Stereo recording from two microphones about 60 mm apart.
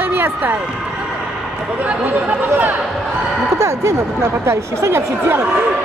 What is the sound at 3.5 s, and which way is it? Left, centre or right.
Speech, right.